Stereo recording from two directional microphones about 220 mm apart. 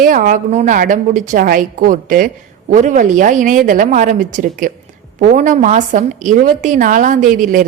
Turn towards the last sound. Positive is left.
turn(degrees=-40)  # may be behind; listen again after turning